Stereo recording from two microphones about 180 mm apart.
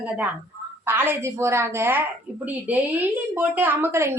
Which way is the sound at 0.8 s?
10° right (ahead or behind).